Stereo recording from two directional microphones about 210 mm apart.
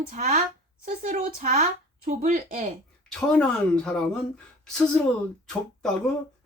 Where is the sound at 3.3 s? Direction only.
5° left (ahead or behind).